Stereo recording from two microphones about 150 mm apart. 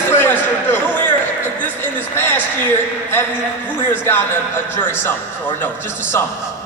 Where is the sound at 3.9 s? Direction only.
15° left (ahead or behind).